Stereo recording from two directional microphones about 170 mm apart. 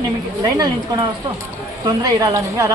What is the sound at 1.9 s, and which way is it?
Speech, 20° right (ahead or behind).